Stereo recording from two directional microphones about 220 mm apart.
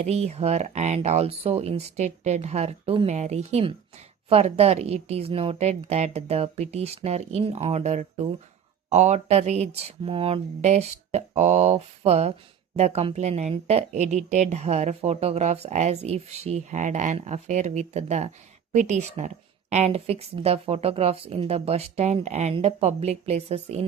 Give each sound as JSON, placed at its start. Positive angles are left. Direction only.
{"t": 0.0, "sound": "a woman's voice", "side_deg": -30}